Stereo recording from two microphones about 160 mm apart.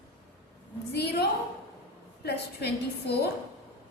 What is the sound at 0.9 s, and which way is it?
Speech, 90° left.